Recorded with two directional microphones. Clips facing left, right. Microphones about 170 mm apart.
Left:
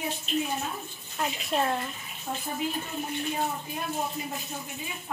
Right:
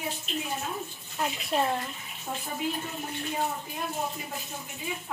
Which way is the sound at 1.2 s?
Centre (ahead or behind).